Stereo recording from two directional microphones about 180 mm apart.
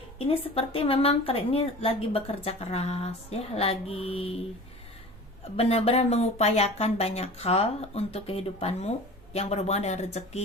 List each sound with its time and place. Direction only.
0.3 s speech: 30° left (ahead or behind)
5.5 s speech: 35° left (ahead or behind)